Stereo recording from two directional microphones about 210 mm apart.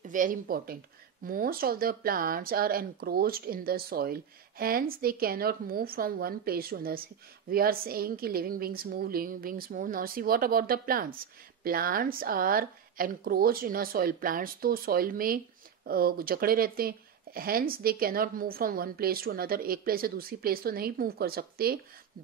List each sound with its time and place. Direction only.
0.0 s speech: 40° right (ahead or behind)